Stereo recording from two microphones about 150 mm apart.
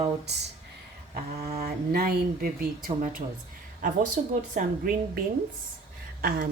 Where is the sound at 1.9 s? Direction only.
85° right.